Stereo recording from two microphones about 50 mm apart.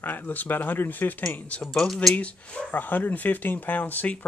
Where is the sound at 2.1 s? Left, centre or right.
Left.